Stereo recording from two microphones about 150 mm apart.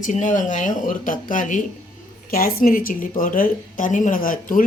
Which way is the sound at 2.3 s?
75° left (ahead or behind).